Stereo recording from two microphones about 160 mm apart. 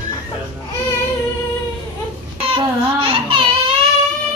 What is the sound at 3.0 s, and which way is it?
Baby cry, 35° right (ahead or behind).